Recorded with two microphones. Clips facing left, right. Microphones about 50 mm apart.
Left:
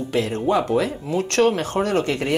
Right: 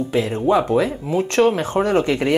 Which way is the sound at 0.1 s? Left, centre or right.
Centre.